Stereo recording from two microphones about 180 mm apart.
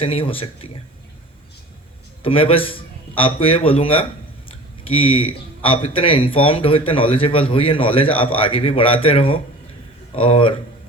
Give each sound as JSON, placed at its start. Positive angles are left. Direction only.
{"t": 0.0, "sound": "speech", "side_deg": 30}
{"t": 2.2, "sound": "speech", "side_deg": 30}